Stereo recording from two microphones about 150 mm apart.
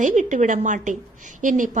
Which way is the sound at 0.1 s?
50° right (ahead or behind).